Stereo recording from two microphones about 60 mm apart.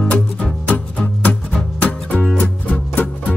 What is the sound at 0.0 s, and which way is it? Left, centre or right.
Music, left.